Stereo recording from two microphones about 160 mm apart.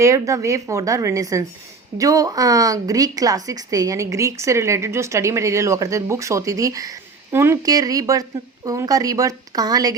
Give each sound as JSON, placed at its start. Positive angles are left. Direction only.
{"t": 0.0, "sound": "a woman's voice", "side_deg": -20}